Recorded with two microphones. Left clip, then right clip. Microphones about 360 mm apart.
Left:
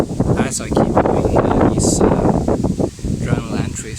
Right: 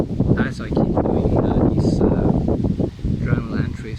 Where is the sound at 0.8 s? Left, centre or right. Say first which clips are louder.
Left 5 dB; left.